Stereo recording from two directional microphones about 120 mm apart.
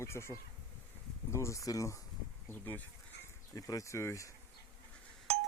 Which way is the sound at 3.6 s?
30° left (ahead or behind).